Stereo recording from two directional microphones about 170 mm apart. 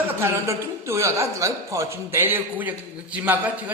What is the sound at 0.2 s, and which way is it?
A man's voice, 15° right (ahead or behind).